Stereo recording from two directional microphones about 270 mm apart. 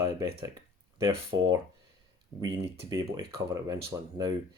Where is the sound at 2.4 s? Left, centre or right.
Centre.